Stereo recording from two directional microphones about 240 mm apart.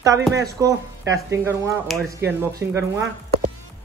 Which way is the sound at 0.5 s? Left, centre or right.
Centre.